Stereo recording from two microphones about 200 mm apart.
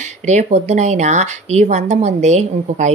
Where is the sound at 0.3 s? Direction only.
35° right (ahead or behind).